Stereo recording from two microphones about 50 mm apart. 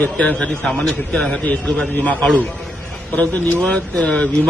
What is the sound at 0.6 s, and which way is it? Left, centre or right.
Speech, centre.